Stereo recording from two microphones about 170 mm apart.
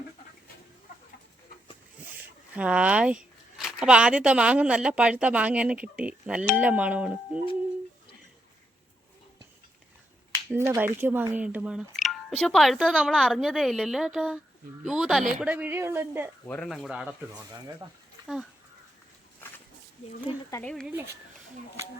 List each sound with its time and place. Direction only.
2.6 s speech: 5° right (ahead or behind)
10.5 s speech: 15° right (ahead or behind)
16.5 s speech: 5° left (ahead or behind)
17.3 s speech: 25° right (ahead or behind)
20.6 s speech: 5° left (ahead or behind)